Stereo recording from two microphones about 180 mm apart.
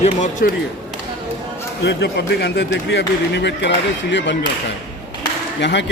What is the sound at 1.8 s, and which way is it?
A man's voice, 65° left (ahead or behind).